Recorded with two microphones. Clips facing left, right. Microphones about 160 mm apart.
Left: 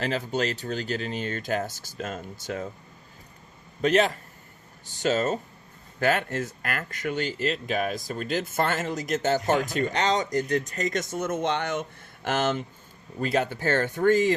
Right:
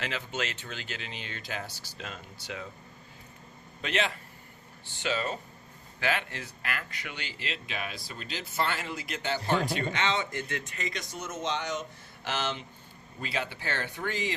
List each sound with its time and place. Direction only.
0.0 s speech: 40° left (ahead or behind)
3.8 s speech: 40° left (ahead or behind)